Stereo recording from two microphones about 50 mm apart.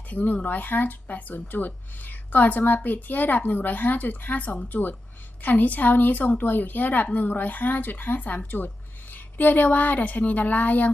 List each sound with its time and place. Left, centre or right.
0.1 s a woman's voice: left